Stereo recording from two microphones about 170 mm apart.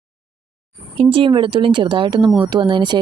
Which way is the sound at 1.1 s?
30° right (ahead or behind).